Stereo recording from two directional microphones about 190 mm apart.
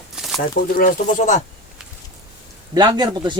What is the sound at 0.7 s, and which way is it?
Speech, 45° left (ahead or behind).